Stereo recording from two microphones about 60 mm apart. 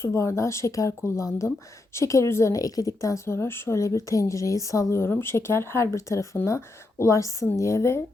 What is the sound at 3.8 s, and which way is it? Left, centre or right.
A woman's voice, left.